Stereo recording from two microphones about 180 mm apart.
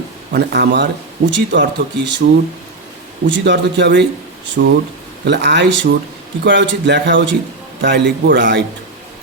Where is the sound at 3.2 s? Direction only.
80° right.